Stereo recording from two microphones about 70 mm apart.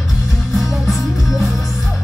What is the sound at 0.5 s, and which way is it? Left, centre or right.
Music, centre.